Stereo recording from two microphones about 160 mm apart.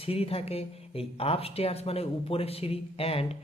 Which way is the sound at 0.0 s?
35° left (ahead or behind).